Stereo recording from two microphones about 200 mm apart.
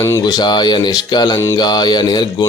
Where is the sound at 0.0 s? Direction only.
15° left (ahead or behind).